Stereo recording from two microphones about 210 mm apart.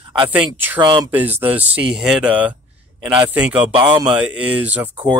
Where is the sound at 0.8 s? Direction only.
20° right (ahead or behind).